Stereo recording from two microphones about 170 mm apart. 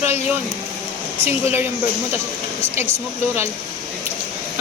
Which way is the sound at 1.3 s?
15° right (ahead or behind).